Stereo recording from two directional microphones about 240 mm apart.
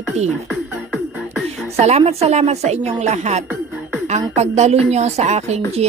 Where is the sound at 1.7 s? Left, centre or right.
Right.